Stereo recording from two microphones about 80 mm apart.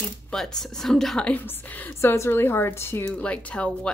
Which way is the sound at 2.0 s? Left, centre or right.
Left.